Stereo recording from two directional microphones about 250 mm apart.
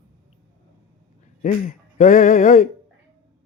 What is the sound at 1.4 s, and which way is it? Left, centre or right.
Speech, left.